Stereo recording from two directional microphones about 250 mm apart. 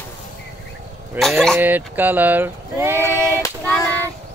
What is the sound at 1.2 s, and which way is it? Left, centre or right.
Speech, centre.